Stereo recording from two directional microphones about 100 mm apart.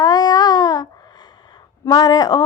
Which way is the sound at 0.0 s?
40° left (ahead or behind).